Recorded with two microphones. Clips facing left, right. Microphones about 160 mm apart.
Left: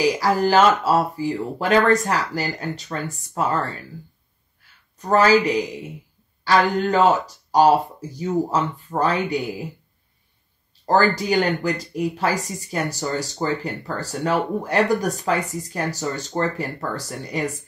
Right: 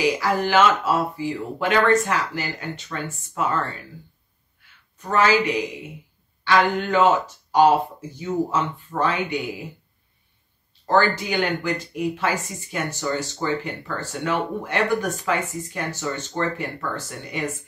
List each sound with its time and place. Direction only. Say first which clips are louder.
0.0 s speech: left 3 dB; 40° left (ahead or behind)
4.9 s speech: left 3 dB; 40° left (ahead or behind)
10.9 s speech: left 2 dB; 40° left (ahead or behind)